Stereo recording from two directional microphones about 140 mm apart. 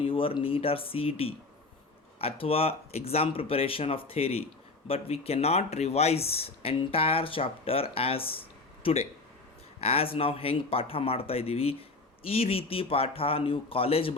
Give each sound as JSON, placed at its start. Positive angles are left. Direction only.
{"t": 0.0, "sound": "speech", "side_deg": 40}